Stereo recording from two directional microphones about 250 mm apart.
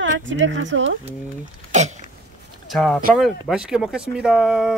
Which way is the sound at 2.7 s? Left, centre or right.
Centre.